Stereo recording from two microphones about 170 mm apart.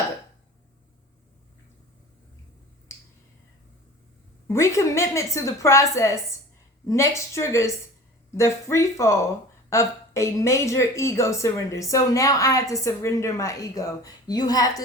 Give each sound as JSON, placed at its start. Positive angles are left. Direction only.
{"t": 2.9, "sound": "finger snapping", "side_deg": 15}
{"t": 4.4, "sound": "a woman's voice", "side_deg": 15}